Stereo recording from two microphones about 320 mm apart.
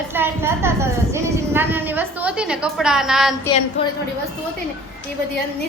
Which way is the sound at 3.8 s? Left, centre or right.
Centre.